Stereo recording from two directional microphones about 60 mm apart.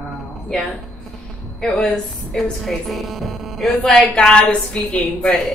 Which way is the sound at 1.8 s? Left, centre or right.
Centre.